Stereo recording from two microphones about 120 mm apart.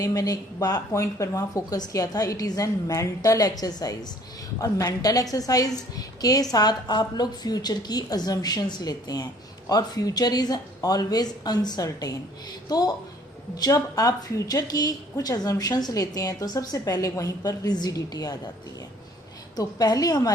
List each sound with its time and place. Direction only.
0.0 s a woman's voice: 30° left (ahead or behind)
19.5 s a woman's voice: 35° left (ahead or behind)